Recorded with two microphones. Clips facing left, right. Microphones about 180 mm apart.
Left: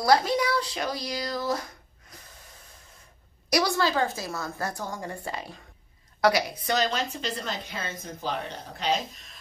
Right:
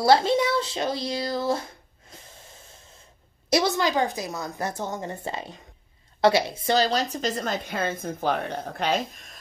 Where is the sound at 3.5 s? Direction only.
20° right (ahead or behind); by 9.0 s 55° right (ahead or behind).